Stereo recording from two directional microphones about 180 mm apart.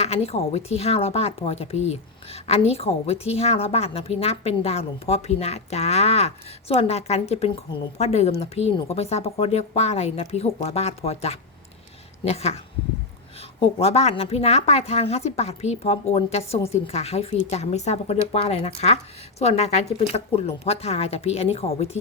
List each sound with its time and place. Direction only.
0.0 s a woman's voice: 35° left (ahead or behind)